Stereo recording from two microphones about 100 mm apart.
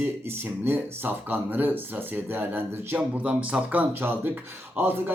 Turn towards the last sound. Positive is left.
turn(degrees=-20)  # may be behind; listen again after turning